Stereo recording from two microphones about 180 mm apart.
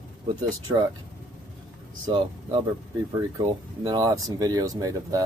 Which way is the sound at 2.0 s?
25° right (ahead or behind).